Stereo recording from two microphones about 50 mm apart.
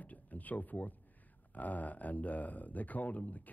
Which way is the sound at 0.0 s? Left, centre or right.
Left.